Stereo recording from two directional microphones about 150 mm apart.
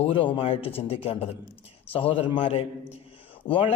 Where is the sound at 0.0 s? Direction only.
35° left (ahead or behind).